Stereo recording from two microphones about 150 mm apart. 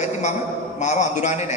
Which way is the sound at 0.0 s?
50° left (ahead or behind).